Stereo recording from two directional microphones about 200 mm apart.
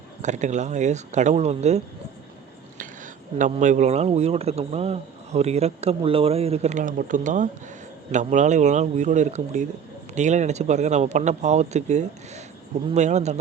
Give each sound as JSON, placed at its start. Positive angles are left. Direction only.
{"t": 0.2, "sound": "speech", "side_deg": -35}
{"t": 3.3, "sound": "speech", "side_deg": -40}